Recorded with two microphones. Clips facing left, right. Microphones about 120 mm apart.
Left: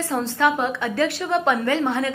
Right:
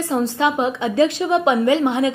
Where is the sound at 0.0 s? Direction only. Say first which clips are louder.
Right 2 dB; 15° right (ahead or behind).